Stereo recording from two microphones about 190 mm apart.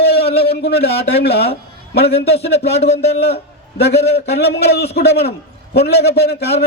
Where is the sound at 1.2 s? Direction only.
60° left (ahead or behind).